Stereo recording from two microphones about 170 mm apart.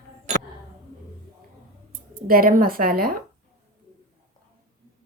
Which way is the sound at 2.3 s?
55° right (ahead or behind).